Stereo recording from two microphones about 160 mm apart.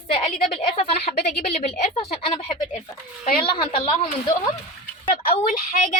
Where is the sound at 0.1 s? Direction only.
40° left (ahead or behind).